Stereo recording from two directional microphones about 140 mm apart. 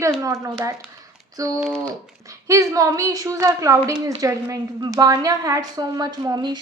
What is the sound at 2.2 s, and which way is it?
A woman's voice, 20° right (ahead or behind).